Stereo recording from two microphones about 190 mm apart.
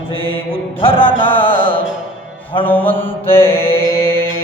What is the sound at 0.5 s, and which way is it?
Music, 30° left (ahead or behind).